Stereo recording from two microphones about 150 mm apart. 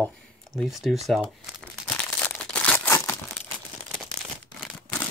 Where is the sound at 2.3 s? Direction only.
5° left (ahead or behind).